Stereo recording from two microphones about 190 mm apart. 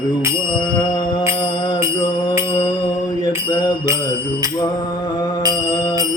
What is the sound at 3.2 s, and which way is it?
Mantra, 20° left (ahead or behind).